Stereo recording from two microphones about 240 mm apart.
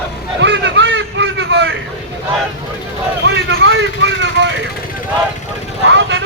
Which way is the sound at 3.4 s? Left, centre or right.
Right.